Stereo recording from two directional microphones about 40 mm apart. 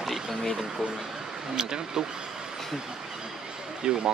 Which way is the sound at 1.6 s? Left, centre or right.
Centre.